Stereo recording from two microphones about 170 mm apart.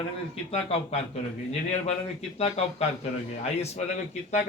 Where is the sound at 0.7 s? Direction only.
40° left (ahead or behind).